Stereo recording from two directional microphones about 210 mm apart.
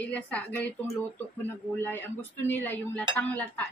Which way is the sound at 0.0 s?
5° left (ahead or behind).